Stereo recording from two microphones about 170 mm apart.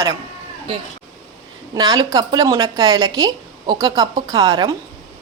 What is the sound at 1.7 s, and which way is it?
Speech, 25° right (ahead or behind).